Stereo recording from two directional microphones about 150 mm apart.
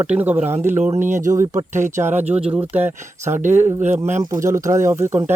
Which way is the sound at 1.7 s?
55° right (ahead or behind).